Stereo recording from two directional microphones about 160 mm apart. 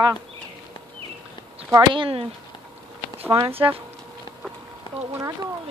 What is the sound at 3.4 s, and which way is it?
Speech, 15° right (ahead or behind).